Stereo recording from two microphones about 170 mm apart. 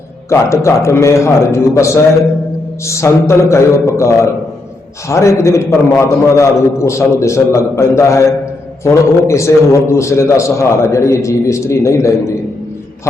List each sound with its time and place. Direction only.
0.3 s a man's voice: 15° left (ahead or behind)